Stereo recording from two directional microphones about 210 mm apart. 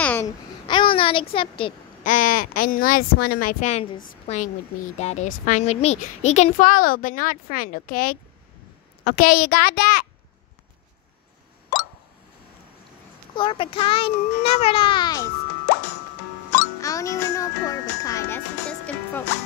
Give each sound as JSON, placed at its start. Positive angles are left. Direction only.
{"t": 0.0, "sound": "babbling", "side_deg": 10}
{"t": 0.7, "sound": "a child's voice", "side_deg": 25}
{"t": 2.0, "sound": "a child's voice", "side_deg": 40}
{"t": 13.4, "sound": "a child's voice", "side_deg": 25}
{"t": 16.5, "sound": "music", "side_deg": 15}